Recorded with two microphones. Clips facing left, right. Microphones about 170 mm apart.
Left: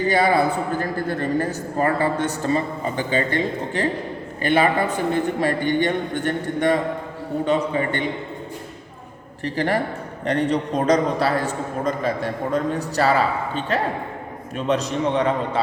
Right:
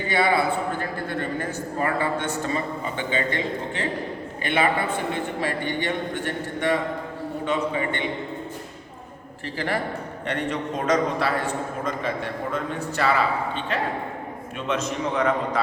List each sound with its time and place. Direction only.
0.0 s a man's voice: 40° left (ahead or behind)
9.4 s a man's voice: 40° left (ahead or behind)